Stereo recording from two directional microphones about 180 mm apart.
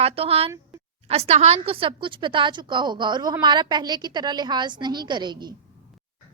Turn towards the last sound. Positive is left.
turn(degrees=-25)  # may be behind; listen again after turning